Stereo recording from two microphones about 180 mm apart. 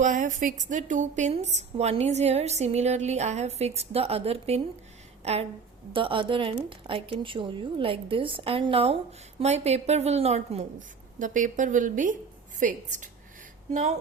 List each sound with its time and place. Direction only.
0.0 s a woman's voice: 45° right (ahead or behind)